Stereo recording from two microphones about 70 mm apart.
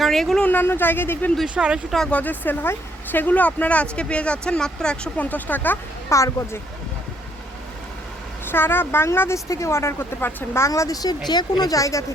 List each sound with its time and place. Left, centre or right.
0.0 s a woman's voice: centre
0.4 s speech: left
1.5 s speech: centre
2.0 s speech: left
5.1 s speech: left
6.1 s speech: left
8.4 s a woman's voice: left
10.7 s speech: left
11.3 s speech: left
11.7 s speech: left